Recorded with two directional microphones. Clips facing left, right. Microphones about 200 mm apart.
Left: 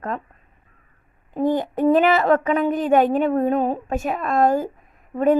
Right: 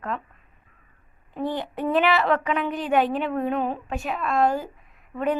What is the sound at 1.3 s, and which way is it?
A woman's voice, 45° left (ahead or behind).